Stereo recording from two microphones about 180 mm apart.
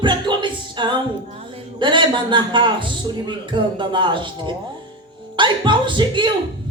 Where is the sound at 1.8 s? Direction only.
25° right (ahead or behind).